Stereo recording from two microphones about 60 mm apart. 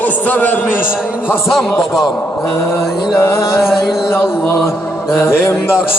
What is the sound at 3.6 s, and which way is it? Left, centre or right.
Speech, centre.